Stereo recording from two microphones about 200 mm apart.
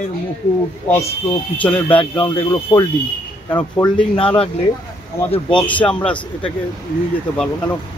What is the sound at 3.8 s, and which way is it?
Speech, 25° left (ahead or behind).